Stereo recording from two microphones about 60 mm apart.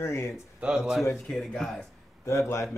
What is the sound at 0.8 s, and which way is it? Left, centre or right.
Speech, centre.